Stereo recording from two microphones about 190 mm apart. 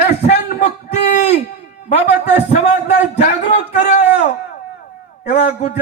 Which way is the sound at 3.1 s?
40° left (ahead or behind).